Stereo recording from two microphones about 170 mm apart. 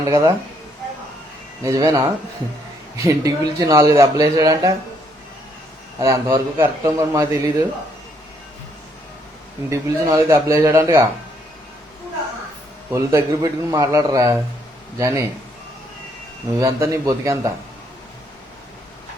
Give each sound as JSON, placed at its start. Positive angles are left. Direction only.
{"t": 0.0, "sound": "a man's voice", "side_deg": -20}
{"t": 1.6, "sound": "speech", "side_deg": -20}
{"t": 6.0, "sound": "a man's voice", "side_deg": -15}
{"t": 9.6, "sound": "a man's voice", "side_deg": -15}
{"t": 12.9, "sound": "a man's voice", "side_deg": -15}
{"t": 16.6, "sound": "a man's voice", "side_deg": -15}